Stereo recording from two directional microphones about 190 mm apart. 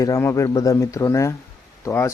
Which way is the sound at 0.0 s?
15° left (ahead or behind).